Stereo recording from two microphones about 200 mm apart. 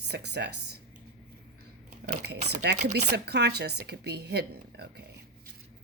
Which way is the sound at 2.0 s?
55° right (ahead or behind).